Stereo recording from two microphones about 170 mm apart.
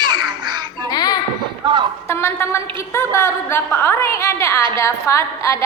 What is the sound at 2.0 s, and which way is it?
A woman's voice, 15° left (ahead or behind).